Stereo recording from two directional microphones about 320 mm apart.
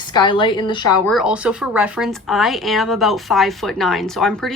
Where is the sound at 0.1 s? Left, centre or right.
Centre.